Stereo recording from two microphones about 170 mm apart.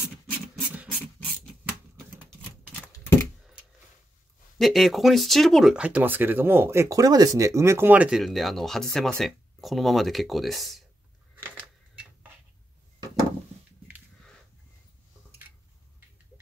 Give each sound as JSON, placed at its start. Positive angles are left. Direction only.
{"t": 2.7, "sound": "typewriter", "side_deg": 15}
{"t": 4.6, "sound": "speech", "side_deg": 0}